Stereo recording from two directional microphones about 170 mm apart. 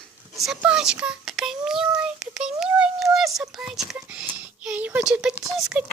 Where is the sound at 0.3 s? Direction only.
Centre (ahead or behind).